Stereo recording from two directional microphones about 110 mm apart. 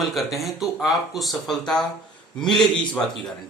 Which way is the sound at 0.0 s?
Centre (ahead or behind).